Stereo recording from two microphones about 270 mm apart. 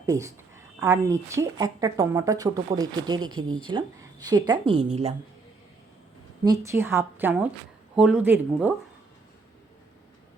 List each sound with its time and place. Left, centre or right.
0.0 s a woman's voice: centre
6.4 s a woman's voice: centre